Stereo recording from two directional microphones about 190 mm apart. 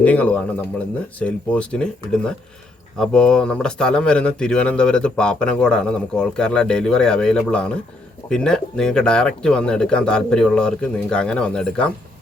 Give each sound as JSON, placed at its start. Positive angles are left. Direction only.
{"t": 0.0, "sound": "speech", "side_deg": 5}